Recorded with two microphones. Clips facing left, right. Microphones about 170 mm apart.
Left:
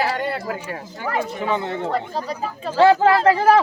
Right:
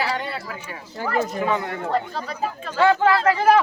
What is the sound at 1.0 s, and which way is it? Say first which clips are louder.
Speech: right 1 dB; 20° left (ahead or behind).